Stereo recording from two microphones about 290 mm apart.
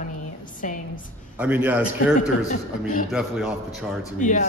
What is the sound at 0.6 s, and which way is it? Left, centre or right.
Speech, left.